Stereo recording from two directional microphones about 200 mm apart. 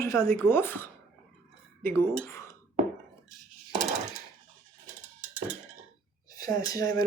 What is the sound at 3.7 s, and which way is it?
Coin, 35° right (ahead or behind).